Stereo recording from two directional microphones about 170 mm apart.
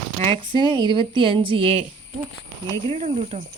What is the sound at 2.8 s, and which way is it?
Speech, 40° right (ahead or behind).